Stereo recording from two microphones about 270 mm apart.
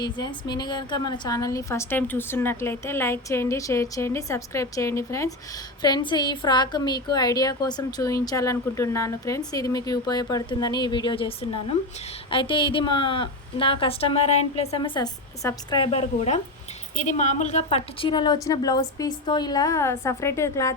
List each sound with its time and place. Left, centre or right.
0.0 s a woman's voice: centre